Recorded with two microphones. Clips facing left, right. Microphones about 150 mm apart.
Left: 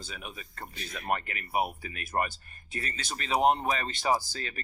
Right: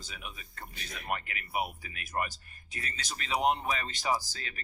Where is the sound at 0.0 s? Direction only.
40° left (ahead or behind).